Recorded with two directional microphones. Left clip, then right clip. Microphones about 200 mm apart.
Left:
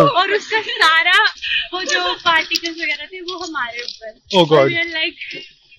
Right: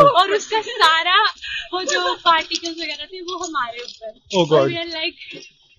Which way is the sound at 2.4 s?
50° right (ahead or behind).